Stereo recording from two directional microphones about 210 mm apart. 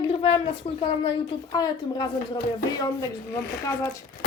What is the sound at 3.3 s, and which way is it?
Speech, 15° left (ahead or behind).